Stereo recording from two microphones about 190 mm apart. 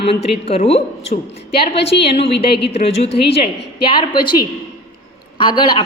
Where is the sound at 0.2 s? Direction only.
30° left (ahead or behind).